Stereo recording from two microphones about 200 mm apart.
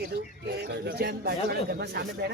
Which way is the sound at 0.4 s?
55° right (ahead or behind).